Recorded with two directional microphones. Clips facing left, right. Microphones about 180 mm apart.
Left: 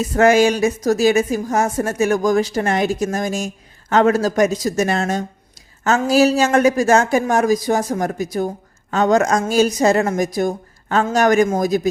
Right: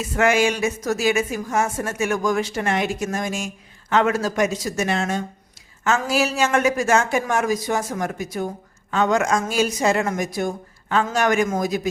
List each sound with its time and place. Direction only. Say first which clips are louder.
0.0 s a woman's voice: left 6 dB; 40° left (ahead or behind)